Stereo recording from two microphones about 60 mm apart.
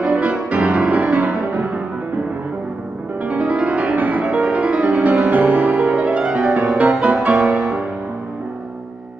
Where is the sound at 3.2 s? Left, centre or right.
Centre.